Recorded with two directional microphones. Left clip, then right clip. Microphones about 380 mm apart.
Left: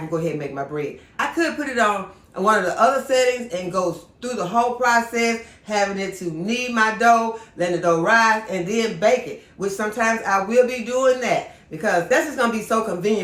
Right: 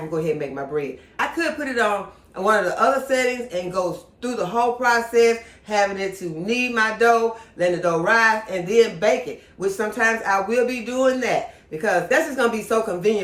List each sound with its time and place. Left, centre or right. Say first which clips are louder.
0.1 s speech: right 1 dB; centre